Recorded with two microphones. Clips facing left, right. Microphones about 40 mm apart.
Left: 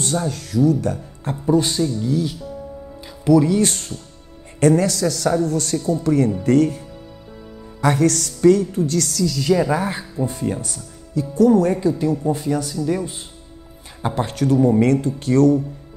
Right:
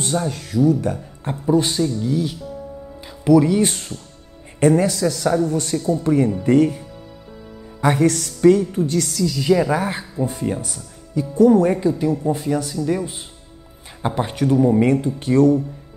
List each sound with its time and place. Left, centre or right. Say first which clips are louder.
0.0 s a woman's voice: even; centre
2.0 s a woman's voice: even; centre
6.9 s music: even; centre
7.8 s a woman's voice: even; centre